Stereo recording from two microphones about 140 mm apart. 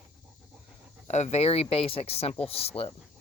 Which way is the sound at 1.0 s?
55° left (ahead or behind).